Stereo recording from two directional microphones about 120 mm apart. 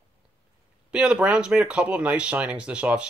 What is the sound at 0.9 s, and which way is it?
Speech, 10° right (ahead or behind).